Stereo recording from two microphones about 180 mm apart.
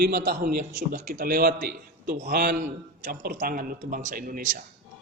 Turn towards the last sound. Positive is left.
turn(degrees=-50)  # may be behind; listen again after turning